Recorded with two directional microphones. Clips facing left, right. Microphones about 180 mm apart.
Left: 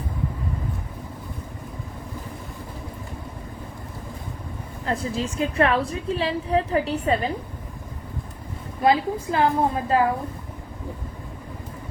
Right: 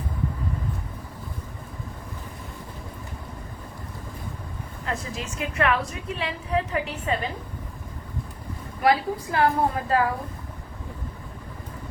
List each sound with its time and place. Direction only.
4.9 s a woman's voice: 30° left (ahead or behind)
8.8 s a woman's voice: 25° left (ahead or behind)